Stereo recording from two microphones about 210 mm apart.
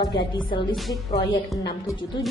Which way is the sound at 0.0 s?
20° left (ahead or behind).